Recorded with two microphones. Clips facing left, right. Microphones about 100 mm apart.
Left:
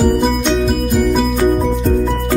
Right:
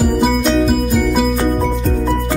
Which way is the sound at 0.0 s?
Centre (ahead or behind).